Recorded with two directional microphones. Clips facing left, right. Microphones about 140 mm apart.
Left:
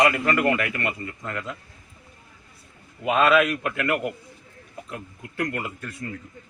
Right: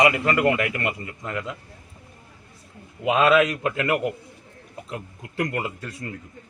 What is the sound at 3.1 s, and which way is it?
A man's voice, 20° right (ahead or behind).